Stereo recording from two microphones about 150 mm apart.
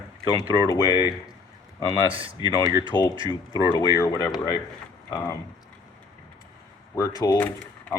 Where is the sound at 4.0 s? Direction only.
20° left (ahead or behind).